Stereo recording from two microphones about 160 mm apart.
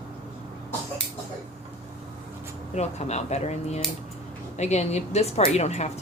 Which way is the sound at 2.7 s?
45° left (ahead or behind).